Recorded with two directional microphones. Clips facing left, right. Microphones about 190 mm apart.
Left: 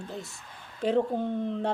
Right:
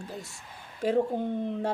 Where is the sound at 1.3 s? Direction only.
15° right (ahead or behind).